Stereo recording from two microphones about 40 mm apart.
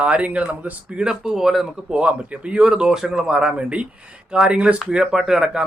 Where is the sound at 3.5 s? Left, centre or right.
Right.